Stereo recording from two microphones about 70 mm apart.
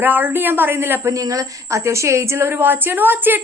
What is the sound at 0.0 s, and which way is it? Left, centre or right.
A woman's voice, right.